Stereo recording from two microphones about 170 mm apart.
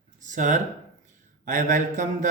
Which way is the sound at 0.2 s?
45° right (ahead or behind).